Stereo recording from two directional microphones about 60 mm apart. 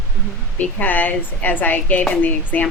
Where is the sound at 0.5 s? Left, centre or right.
Left.